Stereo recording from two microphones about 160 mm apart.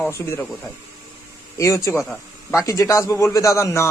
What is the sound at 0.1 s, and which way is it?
Speech, 15° left (ahead or behind).